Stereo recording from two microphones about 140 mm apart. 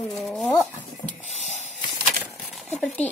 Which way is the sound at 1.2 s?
55° right (ahead or behind).